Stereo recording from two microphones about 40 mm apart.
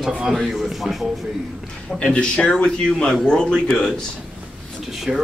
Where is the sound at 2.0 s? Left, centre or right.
Left.